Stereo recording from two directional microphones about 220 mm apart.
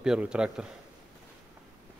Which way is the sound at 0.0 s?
5° right (ahead or behind).